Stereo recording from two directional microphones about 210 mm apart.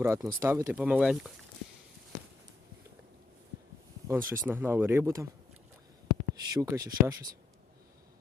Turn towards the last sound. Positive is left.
turn(degrees=-15)  # may be behind; listen again after turning